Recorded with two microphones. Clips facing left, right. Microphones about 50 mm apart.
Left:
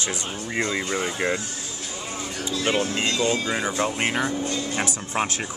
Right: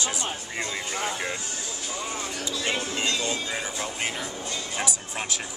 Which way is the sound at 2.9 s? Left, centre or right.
Left.